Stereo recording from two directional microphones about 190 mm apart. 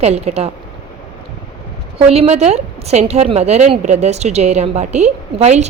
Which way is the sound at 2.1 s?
35° right (ahead or behind).